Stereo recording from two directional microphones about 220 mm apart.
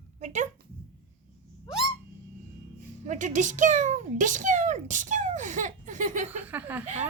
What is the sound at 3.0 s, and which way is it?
Speech, 35° right (ahead or behind).